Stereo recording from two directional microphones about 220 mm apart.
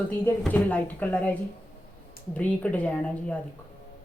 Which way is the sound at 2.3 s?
5° left (ahead or behind).